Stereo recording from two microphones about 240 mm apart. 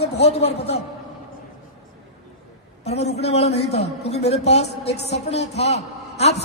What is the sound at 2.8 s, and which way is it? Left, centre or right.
A man's voice, left.